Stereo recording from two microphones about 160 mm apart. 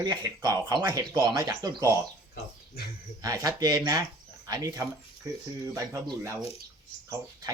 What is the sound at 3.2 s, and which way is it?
Speech, 20° right (ahead or behind).